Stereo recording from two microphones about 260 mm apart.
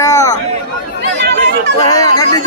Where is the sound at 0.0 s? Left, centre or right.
Centre.